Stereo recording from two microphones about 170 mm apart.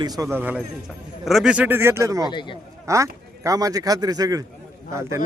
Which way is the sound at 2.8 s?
20° right (ahead or behind).